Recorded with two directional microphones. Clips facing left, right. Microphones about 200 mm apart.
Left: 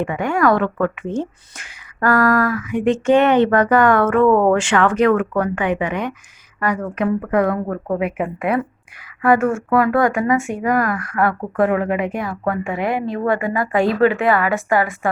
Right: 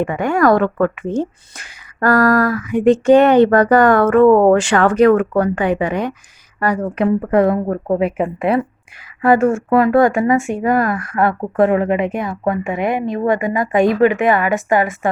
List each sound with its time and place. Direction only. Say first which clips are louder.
0.0 s a woman's voice: right 3 dB; 40° right (ahead or behind); by 15.1 s 20° right (ahead or behind)